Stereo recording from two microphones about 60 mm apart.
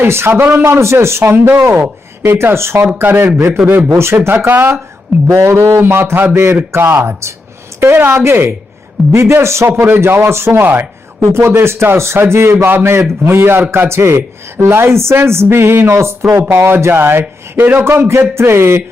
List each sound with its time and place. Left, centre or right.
0.0 s speech: right
0.6 s a man's voice: right
2.4 s a man's voice: right
3.0 s a man's voice: right
3.9 s speech: right
5.3 s a man's voice: right
6.3 s a man's voice: right
6.7 s a man's voice: right
11.3 s a man's voice: right